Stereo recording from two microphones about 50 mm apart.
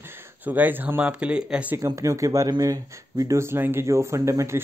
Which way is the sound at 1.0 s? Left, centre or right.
Right.